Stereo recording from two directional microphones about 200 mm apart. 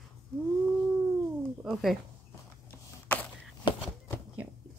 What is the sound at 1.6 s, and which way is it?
Speech, centre (ahead or behind).